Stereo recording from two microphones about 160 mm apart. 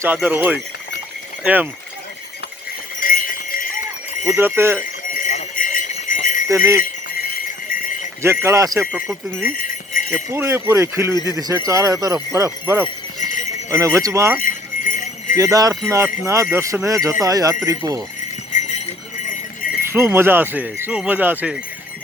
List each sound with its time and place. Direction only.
0.0 s speech: 10° right (ahead or behind)
3.0 s jingle bell: 60° left (ahead or behind)
4.3 s speech: 15° right (ahead or behind)
5.1 s jingle bell: 50° left (ahead or behind)
7.7 s jingle bell: 60° left (ahead or behind)
8.2 s speech: 15° right (ahead or behind)
9.4 s jingle bell: 60° left (ahead or behind)
10.2 s speech: 15° right (ahead or behind)
13.1 s jingle bell: 50° left (ahead or behind)
13.7 s speech: 20° right (ahead or behind)
14.4 s jingle bell: 55° left (ahead or behind)
15.4 s speech: 20° right (ahead or behind)
18.5 s jingle bell: 45° left (ahead or behind)
19.9 s speech: 15° right (ahead or behind)